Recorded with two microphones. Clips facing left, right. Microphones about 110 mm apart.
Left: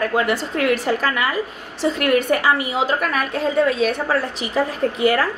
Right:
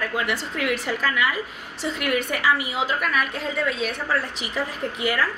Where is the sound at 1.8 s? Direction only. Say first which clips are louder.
Left 7 dB; 45° left (ahead or behind).